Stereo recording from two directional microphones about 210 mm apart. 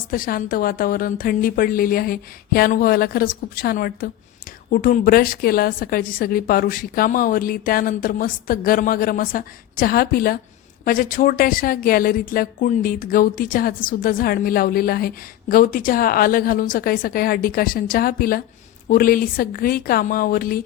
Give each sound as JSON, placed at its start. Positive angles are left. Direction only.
{"t": 0.1, "sound": "speech", "side_deg": 45}